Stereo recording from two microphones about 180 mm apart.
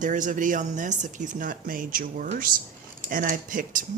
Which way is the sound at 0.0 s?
45° right (ahead or behind).